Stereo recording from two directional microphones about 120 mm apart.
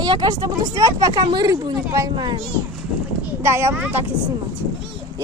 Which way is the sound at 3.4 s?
20° right (ahead or behind).